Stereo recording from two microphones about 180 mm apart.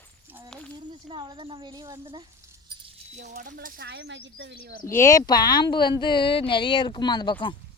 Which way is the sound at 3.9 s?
75° right (ahead or behind).